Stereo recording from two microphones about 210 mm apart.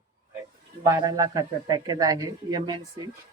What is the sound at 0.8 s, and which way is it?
A man's voice, 15° right (ahead or behind).